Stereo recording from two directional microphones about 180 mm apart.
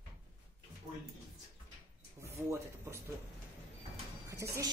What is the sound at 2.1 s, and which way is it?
Speech, 15° right (ahead or behind).